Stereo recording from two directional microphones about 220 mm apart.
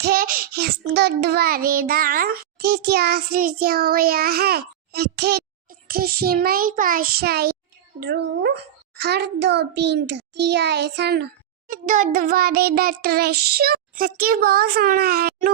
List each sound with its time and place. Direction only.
0.0 s child singing: 40° right (ahead or behind)